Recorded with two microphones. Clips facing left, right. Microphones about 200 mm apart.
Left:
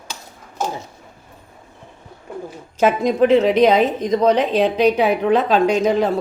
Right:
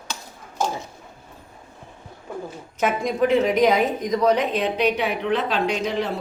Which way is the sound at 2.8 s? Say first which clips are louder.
Left 6 dB; 30° left (ahead or behind).